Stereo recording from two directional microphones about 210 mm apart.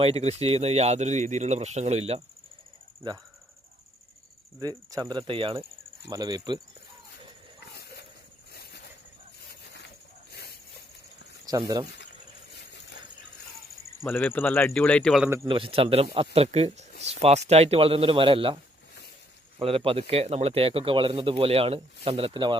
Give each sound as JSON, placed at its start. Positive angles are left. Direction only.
{"t": 0.0, "sound": "speech", "side_deg": -30}
{"t": 4.6, "sound": "speech", "side_deg": -20}
{"t": 7.6, "sound": "a sound", "side_deg": 50}
{"t": 9.5, "sound": "a sound", "side_deg": 55}
{"t": 11.4, "sound": "speech", "side_deg": -15}
{"t": 14.0, "sound": "speech", "side_deg": 10}
{"t": 15.4, "sound": "speech", "side_deg": -25}